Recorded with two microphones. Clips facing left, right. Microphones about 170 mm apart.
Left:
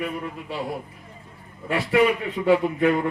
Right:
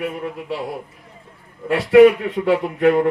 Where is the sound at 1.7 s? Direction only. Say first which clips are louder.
Right 9 dB; 65° right (ahead or behind).